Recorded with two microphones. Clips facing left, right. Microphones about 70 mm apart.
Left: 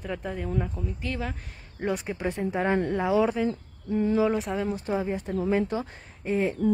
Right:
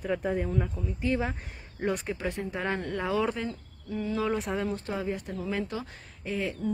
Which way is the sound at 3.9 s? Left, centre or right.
Left.